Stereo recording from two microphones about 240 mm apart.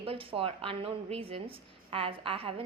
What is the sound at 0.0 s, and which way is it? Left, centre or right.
A woman's voice, right.